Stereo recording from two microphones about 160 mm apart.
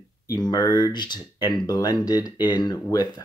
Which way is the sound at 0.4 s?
25° left (ahead or behind).